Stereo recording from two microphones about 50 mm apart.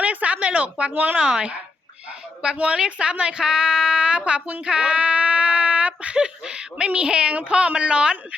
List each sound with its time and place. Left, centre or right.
0.0 s a woman's voice: right
1.2 s a woman's voice: right